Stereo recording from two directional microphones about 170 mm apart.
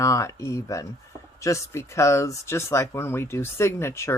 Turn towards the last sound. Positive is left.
turn(degrees=15)  # may be behind; listen again after turning